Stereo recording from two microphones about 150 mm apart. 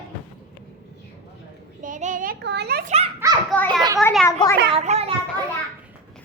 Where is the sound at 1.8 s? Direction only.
60° right (ahead or behind); by 2.9 s 90° right.